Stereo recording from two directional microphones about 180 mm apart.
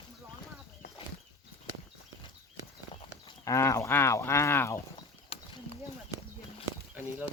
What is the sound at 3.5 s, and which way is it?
Speech, 15° left (ahead or behind).